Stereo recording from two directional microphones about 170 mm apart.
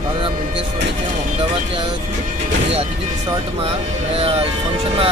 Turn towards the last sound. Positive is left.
turn(degrees=-35)  # may be behind; listen again after turning